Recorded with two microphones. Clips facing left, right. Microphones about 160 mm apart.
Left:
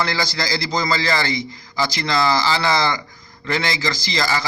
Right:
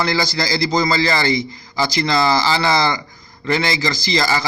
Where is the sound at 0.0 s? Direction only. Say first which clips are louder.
Right 3 dB; 25° right (ahead or behind).